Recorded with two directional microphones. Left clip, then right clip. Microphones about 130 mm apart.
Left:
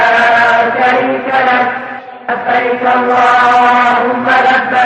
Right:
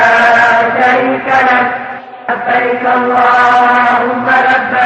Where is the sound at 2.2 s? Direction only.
55° right (ahead or behind).